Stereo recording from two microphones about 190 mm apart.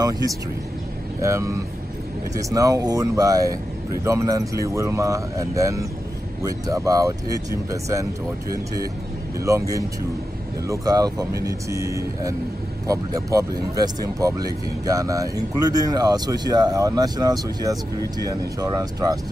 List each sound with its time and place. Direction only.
1.2 s speech: 15° right (ahead or behind)
9.4 s speech: 15° right (ahead or behind)